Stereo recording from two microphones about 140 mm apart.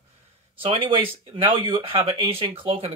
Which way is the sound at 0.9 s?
35° right (ahead or behind).